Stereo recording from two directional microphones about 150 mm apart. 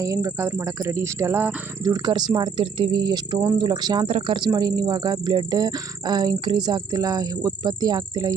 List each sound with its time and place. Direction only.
0.0 s speech: 25° right (ahead or behind)
1.8 s speech: 25° right (ahead or behind)